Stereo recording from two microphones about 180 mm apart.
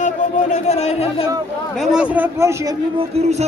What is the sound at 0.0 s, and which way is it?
Speech, 40° left (ahead or behind).